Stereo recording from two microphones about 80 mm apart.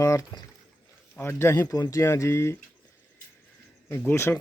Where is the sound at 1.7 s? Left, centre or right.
Left.